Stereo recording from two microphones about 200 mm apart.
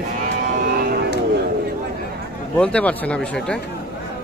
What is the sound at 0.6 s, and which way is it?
Cattle, 45° right (ahead or behind).